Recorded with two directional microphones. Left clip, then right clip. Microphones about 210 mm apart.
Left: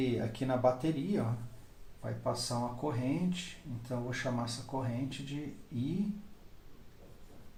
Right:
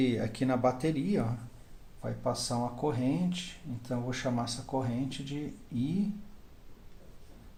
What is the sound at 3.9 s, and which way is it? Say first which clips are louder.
Speech: right 3 dB; 50° right (ahead or behind).